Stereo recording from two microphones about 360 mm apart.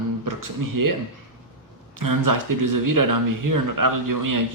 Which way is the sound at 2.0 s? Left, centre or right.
Right.